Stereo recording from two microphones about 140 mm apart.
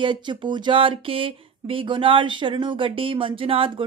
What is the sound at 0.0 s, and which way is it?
Speech, 35° right (ahead or behind).